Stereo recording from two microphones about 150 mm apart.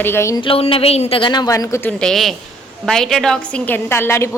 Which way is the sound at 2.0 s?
Centre (ahead or behind).